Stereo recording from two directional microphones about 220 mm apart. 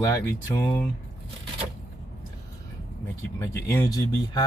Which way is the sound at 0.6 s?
10° left (ahead or behind).